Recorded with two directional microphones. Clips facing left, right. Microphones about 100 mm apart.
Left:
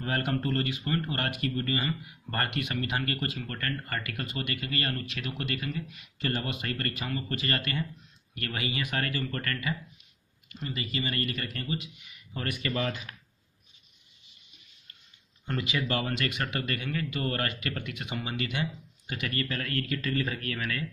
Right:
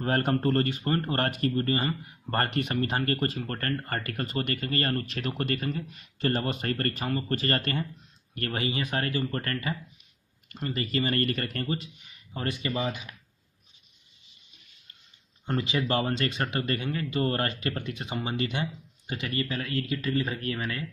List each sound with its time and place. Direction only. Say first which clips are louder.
0.0 s speech: right 5 dB; 40° right (ahead or behind)
8.6 s speech: right 1 dB; 25° right (ahead or behind)
10.5 s speech: right 5 dB; 45° right (ahead or behind); by 13.0 s 15° right (ahead or behind)
15.4 s speech: right 3 dB; 30° right (ahead or behind)